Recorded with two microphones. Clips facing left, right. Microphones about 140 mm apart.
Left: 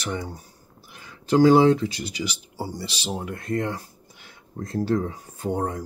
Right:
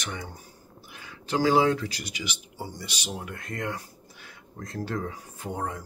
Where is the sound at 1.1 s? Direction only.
45° left (ahead or behind).